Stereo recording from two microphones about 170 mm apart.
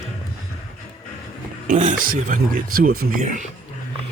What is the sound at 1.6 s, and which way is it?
Speech, 45° right (ahead or behind).